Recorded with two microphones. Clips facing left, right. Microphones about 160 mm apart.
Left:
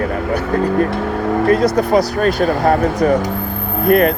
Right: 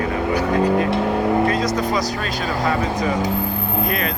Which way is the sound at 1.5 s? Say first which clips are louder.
Left 7 dB; 60° left (ahead or behind).